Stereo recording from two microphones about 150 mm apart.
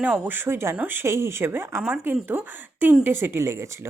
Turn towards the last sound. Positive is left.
turn(degrees=-20)  # may be behind; listen again after turning